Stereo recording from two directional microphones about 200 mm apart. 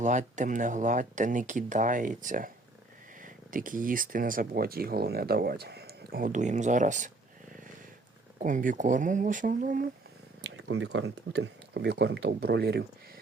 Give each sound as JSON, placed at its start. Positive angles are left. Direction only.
{"t": 0.0, "sound": "speech", "side_deg": -40}
{"t": 8.4, "sound": "speech", "side_deg": -40}
{"t": 10.4, "sound": "speech", "side_deg": -60}